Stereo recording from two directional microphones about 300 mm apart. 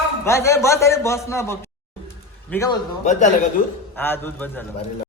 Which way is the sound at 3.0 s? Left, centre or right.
Left.